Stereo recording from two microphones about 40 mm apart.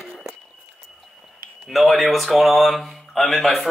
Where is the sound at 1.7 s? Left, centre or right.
Centre.